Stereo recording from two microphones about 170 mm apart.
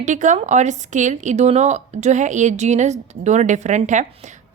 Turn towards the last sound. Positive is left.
turn(degrees=-45)  # may be behind; listen again after turning